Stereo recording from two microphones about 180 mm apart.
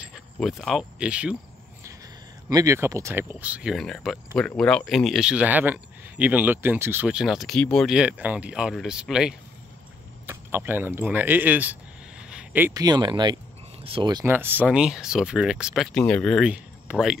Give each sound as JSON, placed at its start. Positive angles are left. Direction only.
{"t": 0.0, "sound": "speech", "side_deg": 0}
{"t": 2.5, "sound": "speech", "side_deg": -15}
{"t": 14.3, "sound": "speech", "side_deg": -10}